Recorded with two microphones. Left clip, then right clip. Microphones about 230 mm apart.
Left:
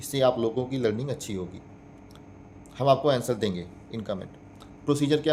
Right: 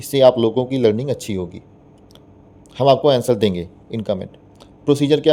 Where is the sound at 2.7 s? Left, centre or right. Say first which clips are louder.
Right 8 dB; right.